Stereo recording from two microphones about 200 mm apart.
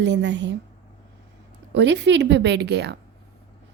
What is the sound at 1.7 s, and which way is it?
A woman's voice, 60° right (ahead or behind).